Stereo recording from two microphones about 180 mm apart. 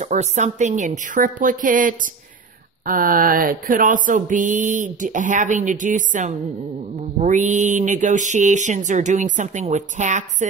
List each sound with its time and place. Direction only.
0.0 s mantra: 40° right (ahead or behind)